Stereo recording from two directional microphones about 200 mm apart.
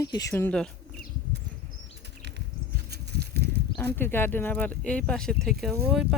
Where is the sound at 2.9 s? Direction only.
55° right (ahead or behind).